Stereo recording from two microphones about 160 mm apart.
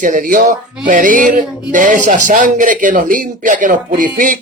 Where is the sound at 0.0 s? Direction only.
55° right (ahead or behind).